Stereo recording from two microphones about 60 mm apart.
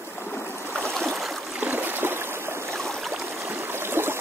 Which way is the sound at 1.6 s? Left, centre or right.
Right.